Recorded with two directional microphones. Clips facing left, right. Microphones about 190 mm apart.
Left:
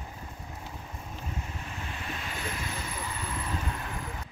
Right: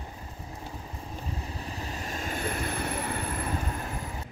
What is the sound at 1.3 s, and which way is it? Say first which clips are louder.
Vehicle: right 2 dB; 35° right (ahead or behind).